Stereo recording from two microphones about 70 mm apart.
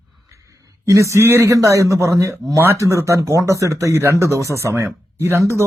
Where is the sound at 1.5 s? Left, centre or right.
Right.